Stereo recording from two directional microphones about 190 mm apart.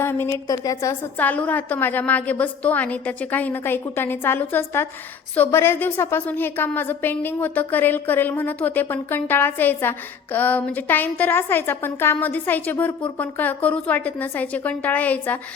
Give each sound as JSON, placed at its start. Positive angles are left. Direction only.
{"t": 0.0, "sound": "a woman's voice", "side_deg": 10}